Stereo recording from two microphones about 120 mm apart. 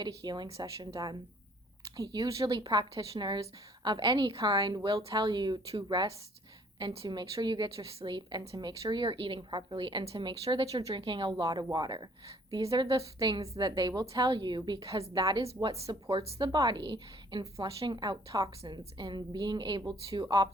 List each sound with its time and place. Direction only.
0.0 s a woman's voice: 35° right (ahead or behind)
1.8 s a woman's voice: 30° right (ahead or behind); by 10.9 s 55° right (ahead or behind)
10.9 s a woman's voice: 45° right (ahead or behind)
15.1 s a woman's voice: 35° right (ahead or behind)
17.7 s speech: 55° right (ahead or behind)
17.9 s a woman's voice: 35° right (ahead or behind)